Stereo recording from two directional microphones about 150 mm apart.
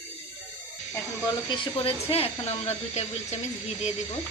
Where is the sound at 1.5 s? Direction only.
40° left (ahead or behind).